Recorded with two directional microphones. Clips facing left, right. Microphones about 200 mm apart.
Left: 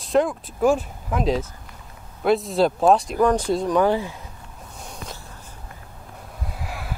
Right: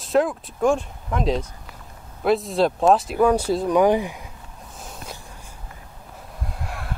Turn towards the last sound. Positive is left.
turn(degrees=0)  # may be behind; listen again after turning